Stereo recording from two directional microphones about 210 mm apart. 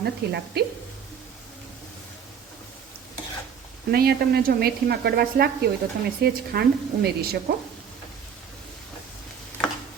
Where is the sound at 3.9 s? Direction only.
50° right (ahead or behind).